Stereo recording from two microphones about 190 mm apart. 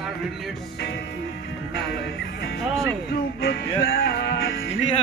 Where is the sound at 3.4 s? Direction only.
55° left (ahead or behind).